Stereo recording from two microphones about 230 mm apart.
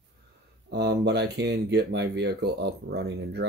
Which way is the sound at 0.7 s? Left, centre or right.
Right.